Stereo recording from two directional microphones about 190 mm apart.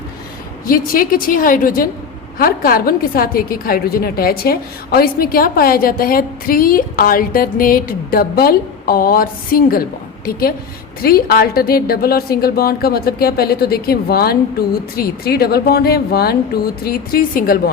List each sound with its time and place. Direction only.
0.6 s a woman's voice: 50° left (ahead or behind)
11.0 s a woman's voice: 50° left (ahead or behind)